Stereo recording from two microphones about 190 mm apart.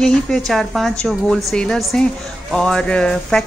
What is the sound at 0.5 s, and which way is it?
A woman's voice, centre (ahead or behind).